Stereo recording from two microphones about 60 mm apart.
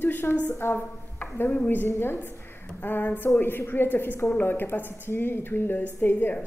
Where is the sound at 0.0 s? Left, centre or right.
Left.